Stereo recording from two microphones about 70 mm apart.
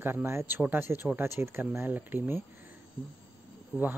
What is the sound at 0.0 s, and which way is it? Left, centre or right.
Speech, right.